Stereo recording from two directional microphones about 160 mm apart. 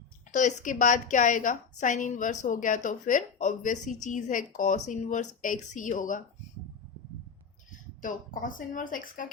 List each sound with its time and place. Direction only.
0.3 s a woman's voice: 50° left (ahead or behind)
7.7 s speech: 60° left (ahead or behind)